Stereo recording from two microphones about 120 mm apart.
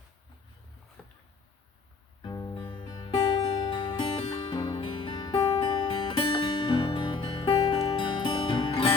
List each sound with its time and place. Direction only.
1.0 s a sound: 10° left (ahead or behind)
2.2 s music: 30° left (ahead or behind)
2.6 s music: 45° left (ahead or behind)